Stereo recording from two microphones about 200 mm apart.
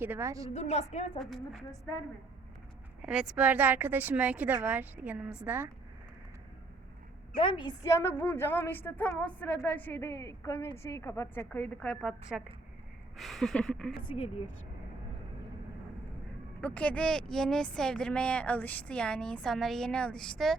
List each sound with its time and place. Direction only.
0.0 s speech: 10° right (ahead or behind)
0.5 s a woman's voice: 35° left (ahead or behind)
1.2 s speech: centre (ahead or behind)
3.0 s speech: 5° right (ahead or behind)
7.3 s a woman's voice: 25° left (ahead or behind); by 13.9 s 5° left (ahead or behind)
14.0 s speech: 25° left (ahead or behind)
16.6 s speech: 5° left (ahead or behind)